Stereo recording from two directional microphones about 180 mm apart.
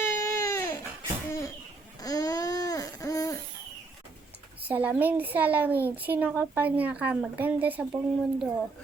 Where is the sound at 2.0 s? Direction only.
20° left (ahead or behind).